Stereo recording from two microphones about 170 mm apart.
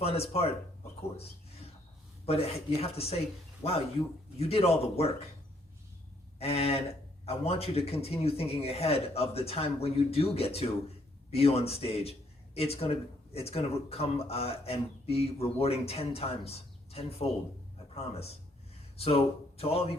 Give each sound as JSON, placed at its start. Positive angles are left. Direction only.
{"t": 0.0, "sound": "a man's voice", "side_deg": 35}
{"t": 2.2, "sound": "a man's voice", "side_deg": 35}
{"t": 6.4, "sound": "a man's voice", "side_deg": 35}